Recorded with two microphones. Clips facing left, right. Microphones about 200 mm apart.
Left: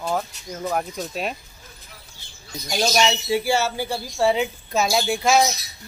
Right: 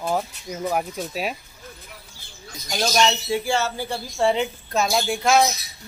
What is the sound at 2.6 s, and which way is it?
Speech, 5° left (ahead or behind).